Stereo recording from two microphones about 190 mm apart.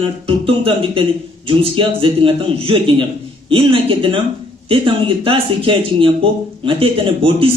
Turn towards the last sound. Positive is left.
turn(degrees=-30)  # may be behind; listen again after turning